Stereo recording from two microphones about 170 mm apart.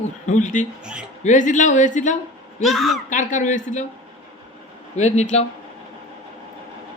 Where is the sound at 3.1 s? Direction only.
50° left (ahead or behind).